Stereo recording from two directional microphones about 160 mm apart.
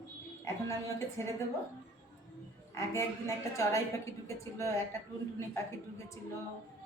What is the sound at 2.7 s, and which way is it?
A woman's voice, 20° left (ahead or behind).